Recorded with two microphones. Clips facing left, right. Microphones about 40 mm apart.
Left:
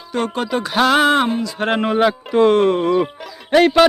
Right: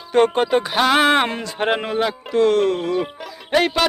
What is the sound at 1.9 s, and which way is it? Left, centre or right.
Speech, centre.